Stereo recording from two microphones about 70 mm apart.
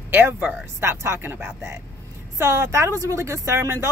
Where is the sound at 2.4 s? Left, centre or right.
Right.